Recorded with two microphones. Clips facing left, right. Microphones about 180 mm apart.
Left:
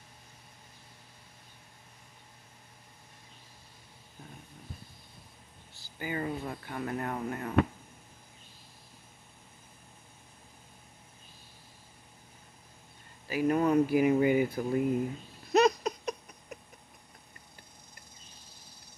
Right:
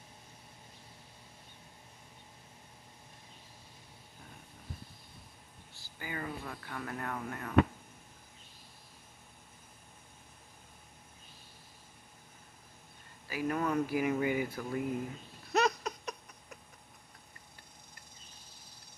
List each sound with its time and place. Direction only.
5.9 s speech: 25° left (ahead or behind)
13.3 s speech: 25° left (ahead or behind)
15.5 s a sound: 20° left (ahead or behind)